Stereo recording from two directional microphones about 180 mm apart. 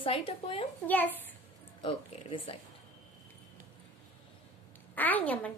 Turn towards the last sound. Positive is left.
turn(degrees=10)  # may be behind; listen again after turning